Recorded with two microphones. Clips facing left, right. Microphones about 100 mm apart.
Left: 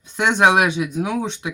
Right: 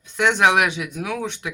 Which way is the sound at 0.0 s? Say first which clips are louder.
Left 1 dB; 20° left (ahead or behind).